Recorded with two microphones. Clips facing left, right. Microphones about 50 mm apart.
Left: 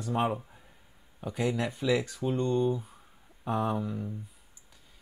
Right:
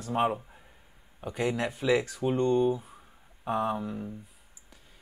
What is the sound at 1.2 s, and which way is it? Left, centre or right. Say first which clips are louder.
Speech: right 1 dB; right.